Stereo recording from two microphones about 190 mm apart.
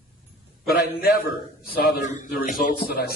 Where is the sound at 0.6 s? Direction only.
55° left (ahead or behind).